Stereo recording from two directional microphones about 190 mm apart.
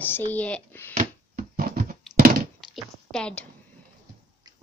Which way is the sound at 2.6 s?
Centre (ahead or behind).